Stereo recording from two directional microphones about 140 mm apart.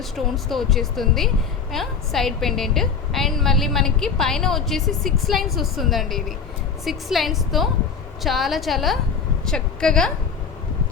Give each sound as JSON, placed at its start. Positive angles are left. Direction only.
{"t": 0.4, "sound": "a woman's voice", "side_deg": 0}